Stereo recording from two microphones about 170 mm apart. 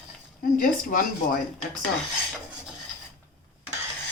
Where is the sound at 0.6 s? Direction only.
55° left (ahead or behind).